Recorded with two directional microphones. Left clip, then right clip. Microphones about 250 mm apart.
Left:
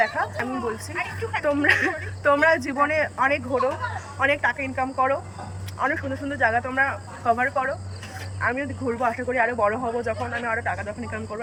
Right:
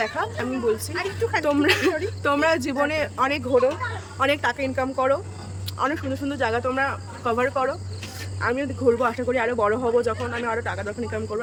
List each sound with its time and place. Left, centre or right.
0.0 s a woman's voice: centre
0.9 s a woman's voice: centre
1.5 s speech: centre